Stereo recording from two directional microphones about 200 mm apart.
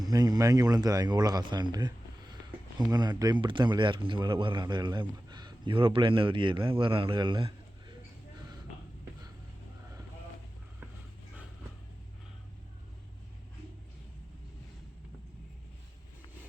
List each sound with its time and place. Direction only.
0.0 s speech: 20° right (ahead or behind)